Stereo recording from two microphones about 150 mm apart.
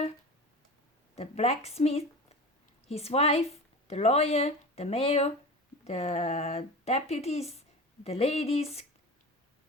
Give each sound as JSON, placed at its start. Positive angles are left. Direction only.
{"t": 1.1, "sound": "speech", "side_deg": 45}